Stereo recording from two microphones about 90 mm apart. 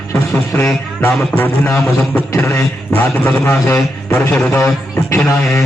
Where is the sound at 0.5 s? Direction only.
20° left (ahead or behind).